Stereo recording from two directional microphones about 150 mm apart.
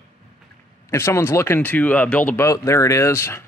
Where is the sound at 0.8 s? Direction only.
20° left (ahead or behind).